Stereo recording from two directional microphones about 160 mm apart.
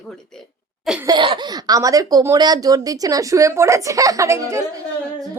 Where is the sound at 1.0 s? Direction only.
30° right (ahead or behind).